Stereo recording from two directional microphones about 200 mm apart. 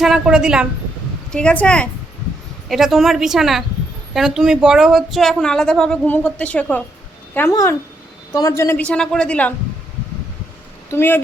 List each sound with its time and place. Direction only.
0.0 s a woman's voice: 5° right (ahead or behind)
10.9 s a man's voice: 10° left (ahead or behind)